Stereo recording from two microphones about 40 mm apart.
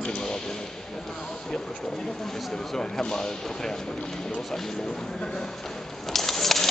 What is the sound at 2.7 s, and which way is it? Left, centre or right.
Speech, centre.